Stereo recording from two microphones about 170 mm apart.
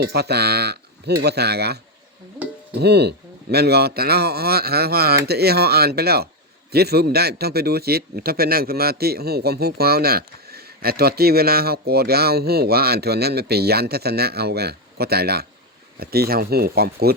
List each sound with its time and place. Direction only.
0.0 s a man's voice: 70° right (ahead or behind)